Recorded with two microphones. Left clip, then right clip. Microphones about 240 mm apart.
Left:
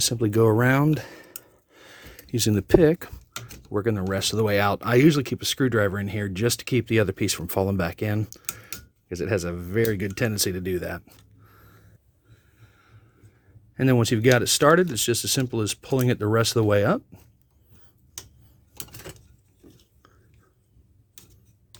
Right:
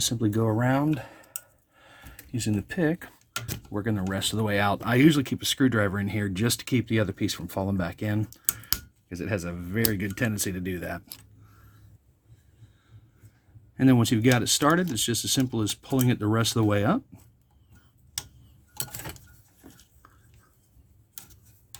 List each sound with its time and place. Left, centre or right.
0.0 s speech: left
0.5 s speech: left
1.7 s a sound: left
3.7 s speech: left
13.7 s speech: left